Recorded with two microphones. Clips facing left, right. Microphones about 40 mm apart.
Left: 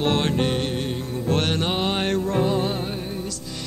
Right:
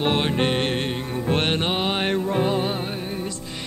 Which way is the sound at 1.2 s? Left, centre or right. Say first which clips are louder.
Even; right.